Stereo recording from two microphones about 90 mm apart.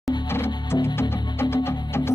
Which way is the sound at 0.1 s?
55° left (ahead or behind).